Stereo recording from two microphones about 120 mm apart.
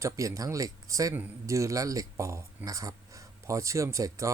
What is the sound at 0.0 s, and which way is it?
Speech, 30° right (ahead or behind).